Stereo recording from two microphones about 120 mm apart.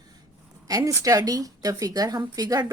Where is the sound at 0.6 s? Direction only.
30° right (ahead or behind).